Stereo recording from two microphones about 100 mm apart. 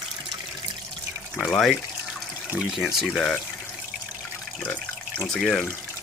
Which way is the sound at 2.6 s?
5° right (ahead or behind).